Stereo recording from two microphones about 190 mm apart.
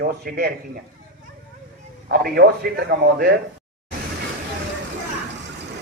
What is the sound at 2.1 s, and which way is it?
A man's voice, 60° right (ahead or behind).